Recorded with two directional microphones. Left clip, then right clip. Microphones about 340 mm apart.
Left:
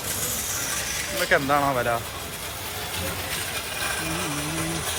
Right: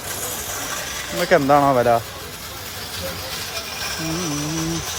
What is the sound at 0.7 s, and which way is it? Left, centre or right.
Speech, right.